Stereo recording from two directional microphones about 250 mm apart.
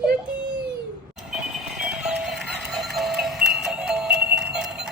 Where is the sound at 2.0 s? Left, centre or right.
Centre.